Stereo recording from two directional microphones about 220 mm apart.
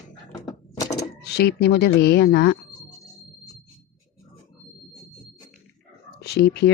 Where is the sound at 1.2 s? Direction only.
45° left (ahead or behind).